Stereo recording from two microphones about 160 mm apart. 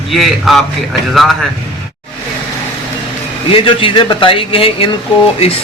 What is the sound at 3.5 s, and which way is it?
A man's voice, 35° left (ahead or behind).